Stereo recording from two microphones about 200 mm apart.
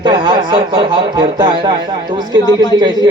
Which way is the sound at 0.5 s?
25° right (ahead or behind).